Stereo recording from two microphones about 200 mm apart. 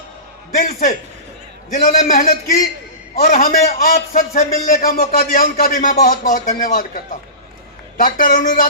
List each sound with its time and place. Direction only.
0.5 s a man's voice: 45° left (ahead or behind)